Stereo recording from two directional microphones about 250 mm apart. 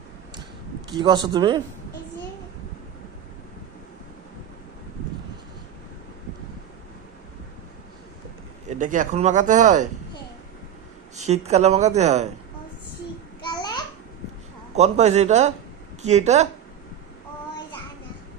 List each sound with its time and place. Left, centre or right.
0.9 s speech: centre
8.8 s speech: right
11.2 s speech: right
13.4 s babbling: centre
14.8 s speech: right